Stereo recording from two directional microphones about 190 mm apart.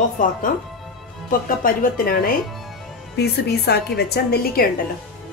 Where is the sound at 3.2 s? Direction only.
60° left (ahead or behind).